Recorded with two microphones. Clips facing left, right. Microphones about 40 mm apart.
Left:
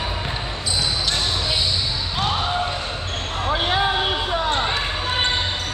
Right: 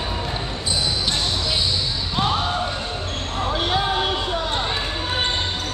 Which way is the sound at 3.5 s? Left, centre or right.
Centre.